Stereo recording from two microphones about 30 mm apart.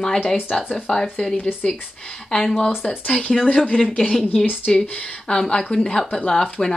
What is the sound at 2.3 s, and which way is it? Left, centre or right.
Speech, left.